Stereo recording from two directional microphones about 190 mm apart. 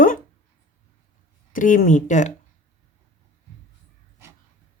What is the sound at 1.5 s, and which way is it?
Speech, 45° left (ahead or behind).